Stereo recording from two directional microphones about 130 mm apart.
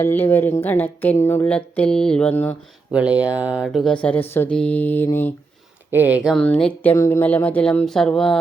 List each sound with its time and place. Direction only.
0.0 s speech: 15° left (ahead or behind)
1.5 s speech: 10° left (ahead or behind)
2.9 s speech: 10° right (ahead or behind)
3.9 s speech: 10° left (ahead or behind)
5.9 s speech: 15° right (ahead or behind)
6.3 s speech: 10° left (ahead or behind)
6.9 s speech: 20° left (ahead or behind); by 8.4 s 5° left (ahead or behind)